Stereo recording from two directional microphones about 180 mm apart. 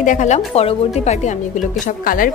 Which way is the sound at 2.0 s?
50° left (ahead or behind).